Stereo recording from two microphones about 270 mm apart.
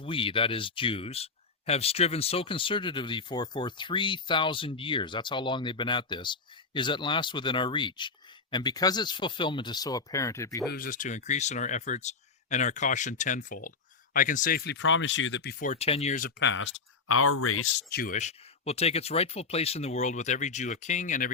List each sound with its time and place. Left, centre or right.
0.0 s speech: centre
10.7 s speech: left
16.4 s speech: left
17.8 s speech: left